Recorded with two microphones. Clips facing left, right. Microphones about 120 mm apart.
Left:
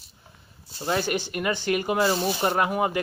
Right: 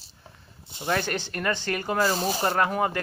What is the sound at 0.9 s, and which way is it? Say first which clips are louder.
Speech: left 2 dB; 10° left (ahead or behind).